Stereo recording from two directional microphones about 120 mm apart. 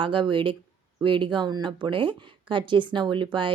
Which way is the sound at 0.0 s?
45° right (ahead or behind).